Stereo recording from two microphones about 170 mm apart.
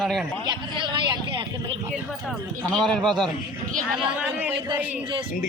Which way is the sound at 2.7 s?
5° left (ahead or behind).